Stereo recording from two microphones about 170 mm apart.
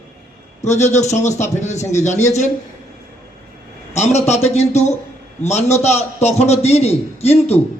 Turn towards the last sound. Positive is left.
turn(degrees=40)  # may be behind; listen again after turning